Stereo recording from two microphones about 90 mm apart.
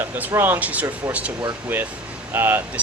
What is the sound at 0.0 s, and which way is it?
Speech, 25° right (ahead or behind).